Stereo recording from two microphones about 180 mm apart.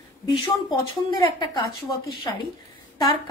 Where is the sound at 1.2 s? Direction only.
25° left (ahead or behind).